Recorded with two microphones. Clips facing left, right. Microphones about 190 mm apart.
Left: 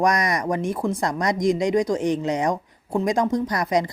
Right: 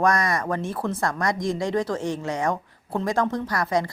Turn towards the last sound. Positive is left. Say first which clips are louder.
# left 3 dB
turn(degrees=20)  # may be behind; listen again after turning